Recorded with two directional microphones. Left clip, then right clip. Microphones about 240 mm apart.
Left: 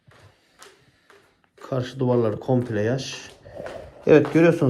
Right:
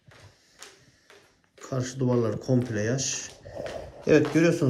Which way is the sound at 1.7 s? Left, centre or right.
Centre.